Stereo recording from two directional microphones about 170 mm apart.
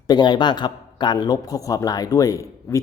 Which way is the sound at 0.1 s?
25° left (ahead or behind).